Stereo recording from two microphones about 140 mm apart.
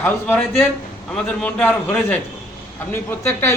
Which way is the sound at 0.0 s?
15° left (ahead or behind).